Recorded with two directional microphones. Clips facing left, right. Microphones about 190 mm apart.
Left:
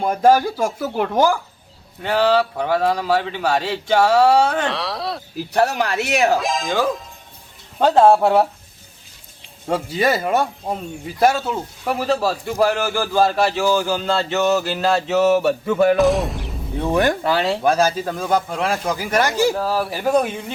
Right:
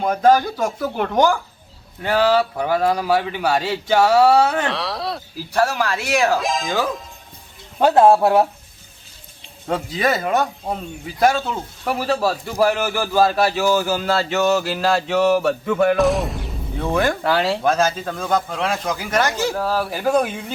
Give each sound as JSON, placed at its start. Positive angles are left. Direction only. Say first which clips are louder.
{"t": 0.0, "sound": "speech", "louder": "even", "side_deg": 10}
{"t": 2.0, "sound": "speech", "louder": "even", "side_deg": -10}
{"t": 5.5, "sound": "speech", "louder": "left 1 dB", "side_deg": 20}
{"t": 6.4, "sound": "a man's voice", "louder": "left 1 dB", "side_deg": 0}
{"t": 9.6, "sound": "a man's voice", "louder": "left 1 dB", "side_deg": 10}
{"t": 16.7, "sound": "speech", "louder": "left 2 dB", "side_deg": 15}
{"t": 17.2, "sound": "a man's voice", "louder": "even", "side_deg": 0}
{"t": 17.6, "sound": "speech", "louder": "left 1 dB", "side_deg": 10}